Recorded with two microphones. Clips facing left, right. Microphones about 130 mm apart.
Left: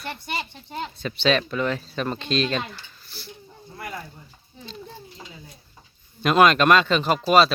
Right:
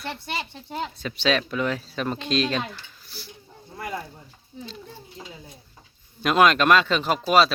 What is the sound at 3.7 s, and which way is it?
Speech, 20° right (ahead or behind).